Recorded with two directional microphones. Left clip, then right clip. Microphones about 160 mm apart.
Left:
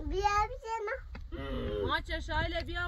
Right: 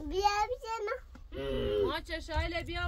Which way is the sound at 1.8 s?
70° left (ahead or behind).